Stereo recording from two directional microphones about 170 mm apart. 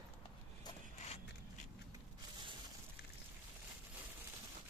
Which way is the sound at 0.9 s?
40° left (ahead or behind).